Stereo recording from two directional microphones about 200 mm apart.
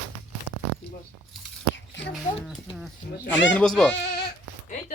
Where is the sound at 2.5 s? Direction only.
Centre (ahead or behind).